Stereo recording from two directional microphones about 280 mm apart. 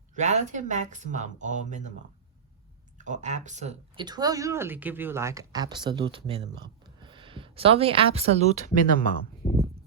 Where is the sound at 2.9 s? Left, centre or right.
Right.